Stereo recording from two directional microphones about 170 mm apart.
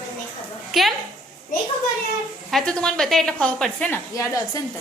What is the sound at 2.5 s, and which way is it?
A woman's voice, centre (ahead or behind).